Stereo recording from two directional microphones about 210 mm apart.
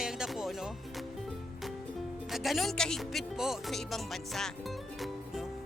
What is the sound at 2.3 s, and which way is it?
Speech, centre (ahead or behind).